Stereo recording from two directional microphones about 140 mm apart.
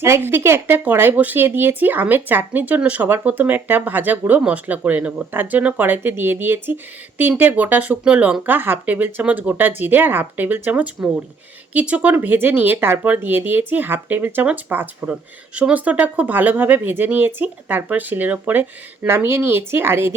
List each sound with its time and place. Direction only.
0.0 s speech: 15° right (ahead or behind)